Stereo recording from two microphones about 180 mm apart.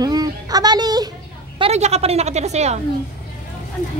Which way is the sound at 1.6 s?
35° right (ahead or behind).